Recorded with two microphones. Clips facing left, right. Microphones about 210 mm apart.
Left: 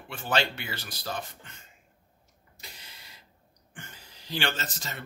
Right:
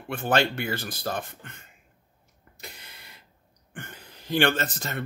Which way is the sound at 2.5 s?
55° right (ahead or behind).